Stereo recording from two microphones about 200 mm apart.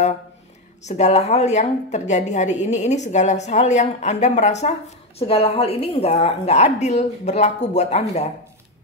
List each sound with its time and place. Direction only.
0.8 s a woman's voice: 35° left (ahead or behind)